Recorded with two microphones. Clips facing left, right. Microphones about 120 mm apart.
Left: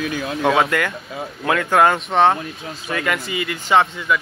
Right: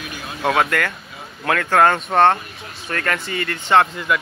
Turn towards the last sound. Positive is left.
turn(degrees=0)  # may be behind; listen again after turning